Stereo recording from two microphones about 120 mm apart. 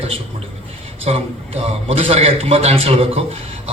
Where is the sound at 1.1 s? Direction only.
65° right (ahead or behind).